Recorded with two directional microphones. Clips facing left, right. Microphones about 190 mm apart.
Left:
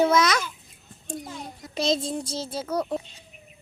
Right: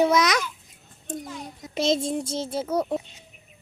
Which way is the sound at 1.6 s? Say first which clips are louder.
Right 2 dB; 20° right (ahead or behind).